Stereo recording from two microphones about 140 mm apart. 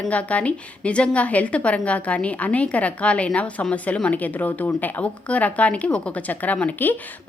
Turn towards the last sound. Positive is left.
turn(degrees=10)  # may be behind; listen again after turning